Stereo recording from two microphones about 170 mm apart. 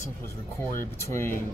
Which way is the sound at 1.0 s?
15° left (ahead or behind).